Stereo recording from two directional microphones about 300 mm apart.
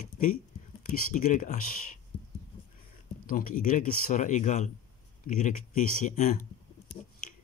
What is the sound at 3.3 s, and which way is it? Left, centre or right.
Speech, left.